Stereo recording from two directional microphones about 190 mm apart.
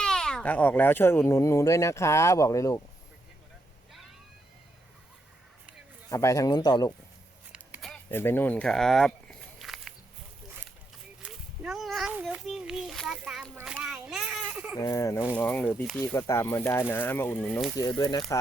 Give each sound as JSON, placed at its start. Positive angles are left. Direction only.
{"t": 0.0, "sound": "speech", "side_deg": 5}
{"t": 6.1, "sound": "a man's voice", "side_deg": 15}
{"t": 7.5, "sound": "a sound", "side_deg": 0}
{"t": 8.1, "sound": "walk", "side_deg": 10}
{"t": 11.2, "sound": "a sound", "side_deg": -5}
{"t": 14.8, "sound": "speech", "side_deg": 15}
{"t": 17.7, "sound": "a man's voice", "side_deg": 20}